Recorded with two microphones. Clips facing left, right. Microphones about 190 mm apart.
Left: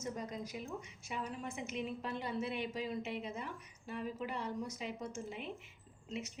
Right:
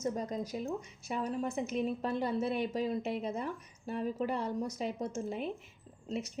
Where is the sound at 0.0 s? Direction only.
35° right (ahead or behind).